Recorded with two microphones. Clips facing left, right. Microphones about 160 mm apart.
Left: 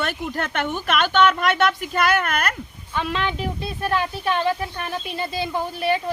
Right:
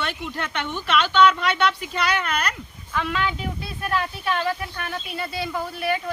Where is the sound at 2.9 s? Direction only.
25° left (ahead or behind).